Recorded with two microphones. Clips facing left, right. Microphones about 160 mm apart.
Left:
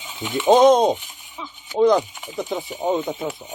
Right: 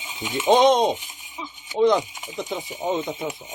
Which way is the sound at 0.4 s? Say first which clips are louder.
Left 3 dB; 5° left (ahead or behind).